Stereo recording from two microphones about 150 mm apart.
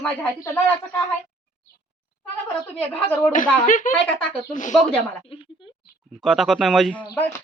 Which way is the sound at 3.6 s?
60° left (ahead or behind).